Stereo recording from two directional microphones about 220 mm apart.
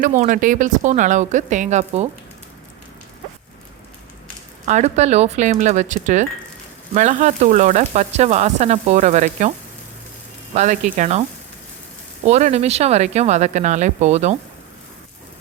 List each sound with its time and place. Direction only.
0.0 s speech: 35° right (ahead or behind)
4.6 s speech: 30° right (ahead or behind)
10.5 s speech: 35° right (ahead or behind)